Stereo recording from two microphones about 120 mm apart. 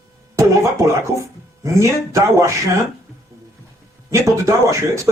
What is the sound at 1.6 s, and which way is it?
Speech, 25° right (ahead or behind).